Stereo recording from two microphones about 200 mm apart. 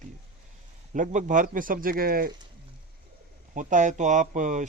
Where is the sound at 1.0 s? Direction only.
40° right (ahead or behind).